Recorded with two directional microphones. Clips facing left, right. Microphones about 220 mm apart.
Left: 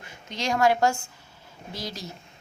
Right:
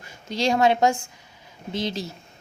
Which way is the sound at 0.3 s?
30° right (ahead or behind).